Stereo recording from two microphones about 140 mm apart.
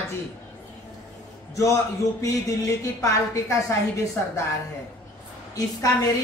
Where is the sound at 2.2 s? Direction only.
20° left (ahead or behind).